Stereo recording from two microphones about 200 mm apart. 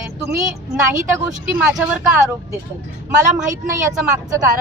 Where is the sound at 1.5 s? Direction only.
10° right (ahead or behind).